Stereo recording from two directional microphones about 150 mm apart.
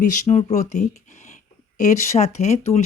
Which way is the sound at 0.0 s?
50° left (ahead or behind).